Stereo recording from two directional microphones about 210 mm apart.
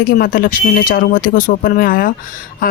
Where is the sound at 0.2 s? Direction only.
45° left (ahead or behind).